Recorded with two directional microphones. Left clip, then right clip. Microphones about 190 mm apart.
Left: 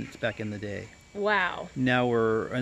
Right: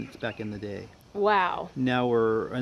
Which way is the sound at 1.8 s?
20° left (ahead or behind).